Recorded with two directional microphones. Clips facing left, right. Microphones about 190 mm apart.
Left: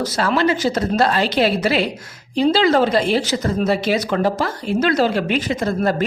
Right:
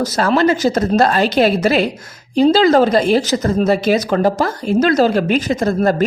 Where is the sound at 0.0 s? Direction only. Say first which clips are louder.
Right 4 dB; 45° right (ahead or behind).